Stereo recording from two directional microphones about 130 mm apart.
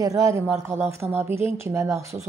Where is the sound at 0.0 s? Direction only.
25° right (ahead or behind).